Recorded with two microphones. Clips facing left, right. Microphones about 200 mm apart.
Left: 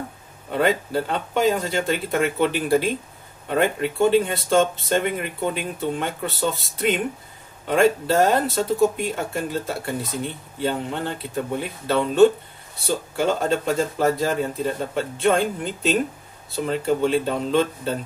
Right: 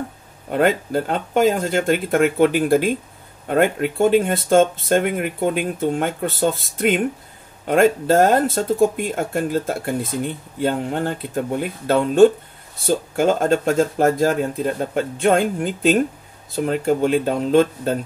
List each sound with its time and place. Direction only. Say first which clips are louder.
0.5 s speech: right 3 dB; 50° right (ahead or behind)